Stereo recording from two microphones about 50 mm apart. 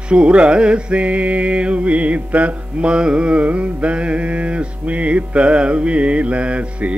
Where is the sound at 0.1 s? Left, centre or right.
Right.